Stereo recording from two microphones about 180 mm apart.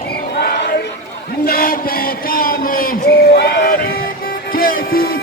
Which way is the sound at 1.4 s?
55° left (ahead or behind).